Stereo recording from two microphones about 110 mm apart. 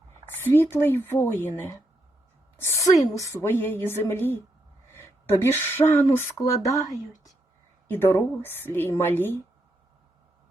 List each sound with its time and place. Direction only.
0.3 s speech: 20° left (ahead or behind)
2.6 s a sound: 25° left (ahead or behind)
3.2 s speech: 25° left (ahead or behind)
7.9 s speech: 20° left (ahead or behind)